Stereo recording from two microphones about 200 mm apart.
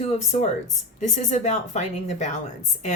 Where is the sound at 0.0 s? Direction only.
30° left (ahead or behind).